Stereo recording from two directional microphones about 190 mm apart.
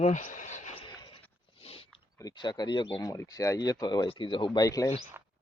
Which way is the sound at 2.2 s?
20° left (ahead or behind).